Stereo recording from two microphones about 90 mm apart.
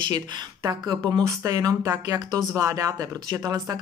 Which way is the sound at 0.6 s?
40° right (ahead or behind).